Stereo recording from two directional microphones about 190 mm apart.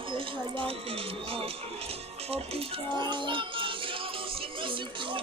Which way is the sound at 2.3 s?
30° right (ahead or behind).